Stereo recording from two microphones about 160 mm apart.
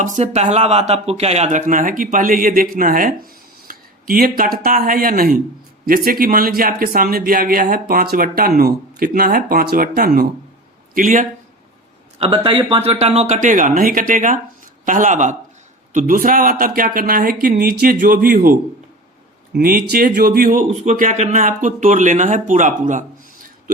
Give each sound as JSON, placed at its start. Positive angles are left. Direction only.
{"t": 0.0, "sound": "speech", "side_deg": -50}
{"t": 12.2, "sound": "speech", "side_deg": -35}
{"t": 19.5, "sound": "speech", "side_deg": -70}